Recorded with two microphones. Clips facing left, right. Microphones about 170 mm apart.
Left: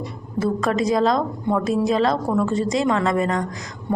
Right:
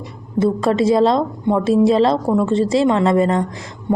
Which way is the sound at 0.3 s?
30° right (ahead or behind).